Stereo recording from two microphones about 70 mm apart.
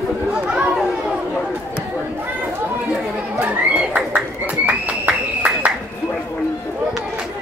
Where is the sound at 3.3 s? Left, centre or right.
Centre.